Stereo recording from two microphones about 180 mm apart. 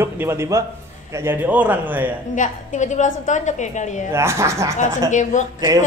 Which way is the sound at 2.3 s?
45° left (ahead or behind).